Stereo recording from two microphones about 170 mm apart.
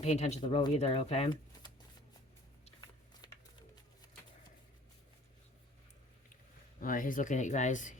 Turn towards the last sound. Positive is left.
turn(degrees=45)  # may be behind; listen again after turning